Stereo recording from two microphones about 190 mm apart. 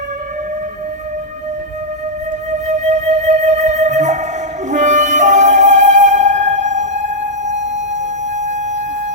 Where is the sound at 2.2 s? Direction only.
40° right (ahead or behind).